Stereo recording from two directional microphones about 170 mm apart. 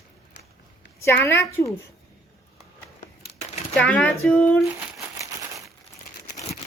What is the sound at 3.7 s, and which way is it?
Speech, 5° left (ahead or behind).